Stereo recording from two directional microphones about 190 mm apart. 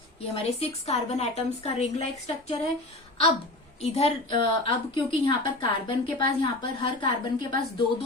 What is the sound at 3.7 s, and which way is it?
A woman's voice, 35° left (ahead or behind).